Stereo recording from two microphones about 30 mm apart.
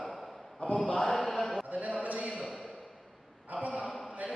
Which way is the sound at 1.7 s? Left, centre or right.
Right.